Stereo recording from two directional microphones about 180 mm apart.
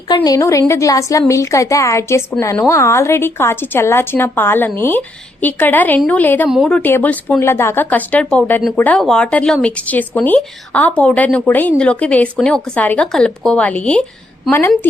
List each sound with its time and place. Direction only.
0.3 s speech: 15° left (ahead or behind)